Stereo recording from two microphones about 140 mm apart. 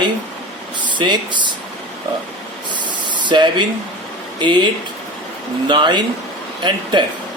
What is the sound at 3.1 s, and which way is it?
Speech, 35° right (ahead or behind).